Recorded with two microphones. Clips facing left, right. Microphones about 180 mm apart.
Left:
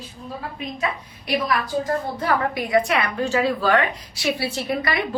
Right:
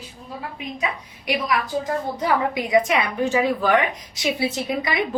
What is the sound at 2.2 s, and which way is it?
A woman's voice, 15° right (ahead or behind).